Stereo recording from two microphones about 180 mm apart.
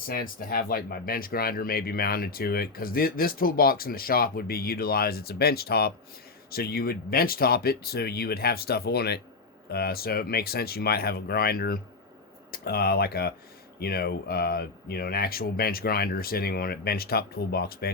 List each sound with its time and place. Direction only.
0.1 s speech: 55° left (ahead or behind)